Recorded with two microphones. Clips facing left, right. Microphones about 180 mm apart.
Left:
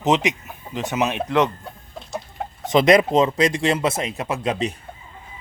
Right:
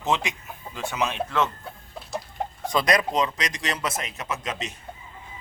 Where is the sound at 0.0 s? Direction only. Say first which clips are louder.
Left 7 dB; 20° left (ahead or behind).